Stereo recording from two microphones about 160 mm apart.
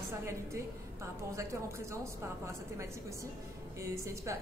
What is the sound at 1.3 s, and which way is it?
A woman's voice, 20° right (ahead or behind).